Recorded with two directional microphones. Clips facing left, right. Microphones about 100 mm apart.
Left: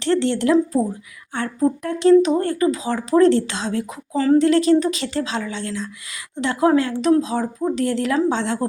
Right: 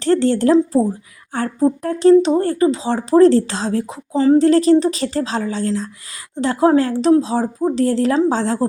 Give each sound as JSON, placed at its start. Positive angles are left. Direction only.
{"t": 0.0, "sound": "speech", "side_deg": -40}
{"t": 0.5, "sound": "speech", "side_deg": -30}
{"t": 4.1, "sound": "speech", "side_deg": -20}
{"t": 4.4, "sound": "speech", "side_deg": -35}